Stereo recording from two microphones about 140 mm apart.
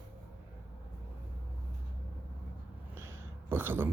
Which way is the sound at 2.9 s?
15° right (ahead or behind).